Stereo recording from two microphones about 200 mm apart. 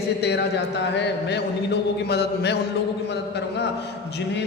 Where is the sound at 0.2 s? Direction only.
55° left (ahead or behind).